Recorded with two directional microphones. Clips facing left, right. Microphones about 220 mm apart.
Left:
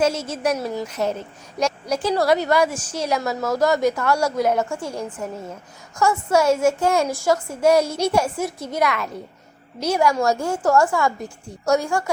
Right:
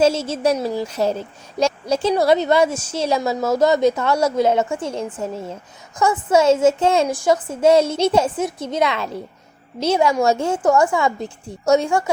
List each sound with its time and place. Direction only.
0.0 s a woman's voice: 25° right (ahead or behind)